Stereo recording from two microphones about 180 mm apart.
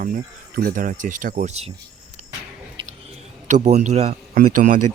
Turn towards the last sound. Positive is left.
turn(degrees=-50)  # may be behind; listen again after turning